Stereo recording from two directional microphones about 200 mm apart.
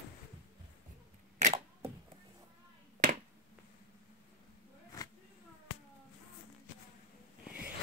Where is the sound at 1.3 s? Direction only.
35° right (ahead or behind).